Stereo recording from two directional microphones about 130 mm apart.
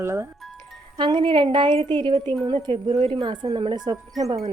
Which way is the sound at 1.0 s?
35° right (ahead or behind).